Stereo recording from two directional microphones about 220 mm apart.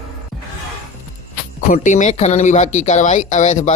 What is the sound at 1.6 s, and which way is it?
Speech, 35° left (ahead or behind).